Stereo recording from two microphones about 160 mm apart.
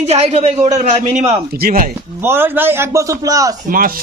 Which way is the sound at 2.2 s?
15° right (ahead or behind).